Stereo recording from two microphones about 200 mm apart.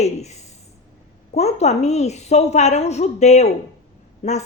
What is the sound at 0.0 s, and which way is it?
A woman's voice, 35° left (ahead or behind).